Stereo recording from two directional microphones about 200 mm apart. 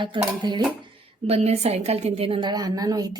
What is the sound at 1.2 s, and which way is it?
A woman's voice, 30° right (ahead or behind).